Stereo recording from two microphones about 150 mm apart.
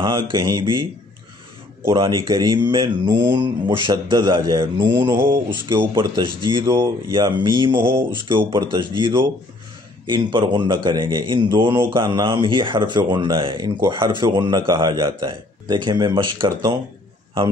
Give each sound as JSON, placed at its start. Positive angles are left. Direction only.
{"t": 0.0, "sound": "speech", "side_deg": -30}
{"t": 2.0, "sound": "speech", "side_deg": -30}
{"t": 5.1, "sound": "mantra", "side_deg": -15}
{"t": 5.9, "sound": "speech", "side_deg": -35}
{"t": 7.7, "sound": "mantra", "side_deg": -15}
{"t": 8.5, "sound": "speech", "side_deg": -30}